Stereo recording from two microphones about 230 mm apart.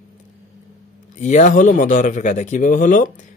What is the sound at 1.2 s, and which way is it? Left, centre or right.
Mantra, left.